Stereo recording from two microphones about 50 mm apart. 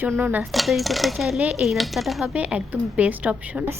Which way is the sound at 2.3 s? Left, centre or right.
Right.